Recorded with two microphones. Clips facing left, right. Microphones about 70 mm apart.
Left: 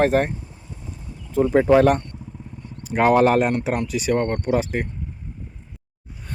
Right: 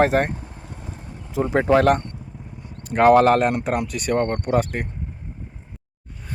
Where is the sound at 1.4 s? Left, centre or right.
Centre.